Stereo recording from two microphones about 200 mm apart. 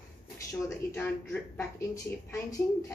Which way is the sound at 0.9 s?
10° left (ahead or behind).